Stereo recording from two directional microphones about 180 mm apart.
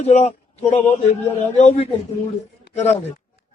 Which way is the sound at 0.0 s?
40° left (ahead or behind).